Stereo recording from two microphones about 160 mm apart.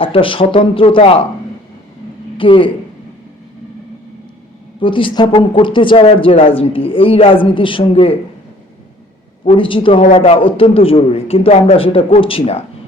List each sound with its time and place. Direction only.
0.0 s a man's voice: 35° left (ahead or behind)
2.4 s a man's voice: 35° left (ahead or behind)
4.8 s a man's voice: 30° left (ahead or behind)
9.4 s a man's voice: 35° left (ahead or behind)